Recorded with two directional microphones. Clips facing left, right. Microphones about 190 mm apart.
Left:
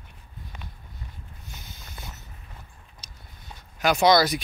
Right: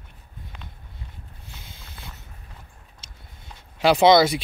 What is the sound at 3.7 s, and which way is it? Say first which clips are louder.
Speech: right 4 dB; 30° right (ahead or behind).